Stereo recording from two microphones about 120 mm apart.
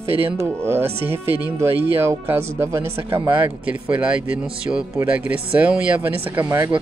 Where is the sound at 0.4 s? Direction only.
20° right (ahead or behind).